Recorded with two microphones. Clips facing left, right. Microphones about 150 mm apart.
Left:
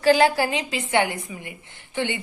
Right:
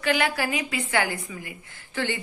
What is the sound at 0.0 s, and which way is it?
A woman's voice, 30° left (ahead or behind).